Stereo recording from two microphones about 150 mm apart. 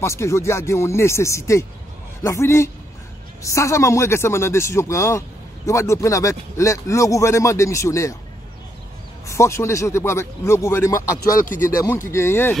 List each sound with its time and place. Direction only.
0.0 s speech: 20° left (ahead or behind)
9.3 s speech: 20° left (ahead or behind)
11.2 s speech: 65° left (ahead or behind)
11.8 s speech: 15° left (ahead or behind)